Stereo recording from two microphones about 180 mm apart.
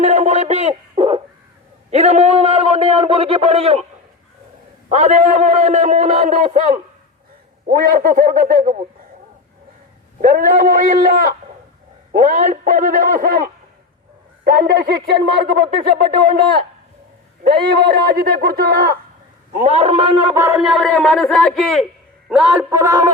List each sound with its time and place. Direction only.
0.0 s a sound: 40° right (ahead or behind)
1.9 s a man's voice: 35° right (ahead or behind)
4.9 s a man's voice: 40° right (ahead or behind)
7.7 s speech: 50° right (ahead or behind)
10.2 s speech: 50° right (ahead or behind)
15.6 s a sound: 25° right (ahead or behind)
17.5 s speech: 60° right (ahead or behind)
19.5 s a man's voice: 40° right (ahead or behind)
20.3 s speech: 15° right (ahead or behind)